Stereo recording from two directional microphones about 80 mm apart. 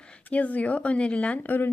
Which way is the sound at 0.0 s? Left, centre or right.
Centre.